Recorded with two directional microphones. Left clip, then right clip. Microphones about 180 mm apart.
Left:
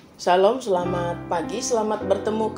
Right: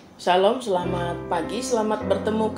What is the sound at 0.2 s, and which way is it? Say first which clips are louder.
Speech: left 1 dB; 30° left (ahead or behind).